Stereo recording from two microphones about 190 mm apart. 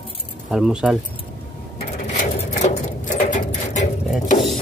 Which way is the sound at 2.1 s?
40° left (ahead or behind).